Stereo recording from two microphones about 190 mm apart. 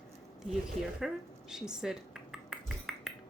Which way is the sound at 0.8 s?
Centre (ahead or behind).